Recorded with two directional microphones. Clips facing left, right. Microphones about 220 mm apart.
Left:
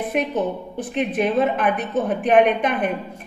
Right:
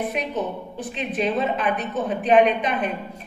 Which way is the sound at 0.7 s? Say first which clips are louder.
Left 5 dB; 55° left (ahead or behind).